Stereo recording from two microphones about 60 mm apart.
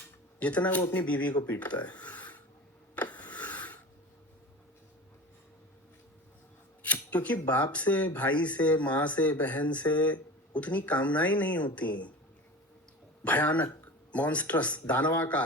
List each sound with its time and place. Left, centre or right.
0.3 s speech: left
0.8 s speech: left
1.0 s speech: left
2.9 s rub: left
6.8 s a sound: left
7.4 s speech: left
13.2 s speech: left